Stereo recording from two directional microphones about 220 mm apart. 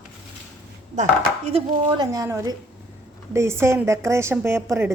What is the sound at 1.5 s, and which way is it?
A woman's voice, 25° right (ahead or behind).